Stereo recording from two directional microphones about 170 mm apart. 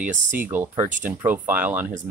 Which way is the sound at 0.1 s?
50° right (ahead or behind).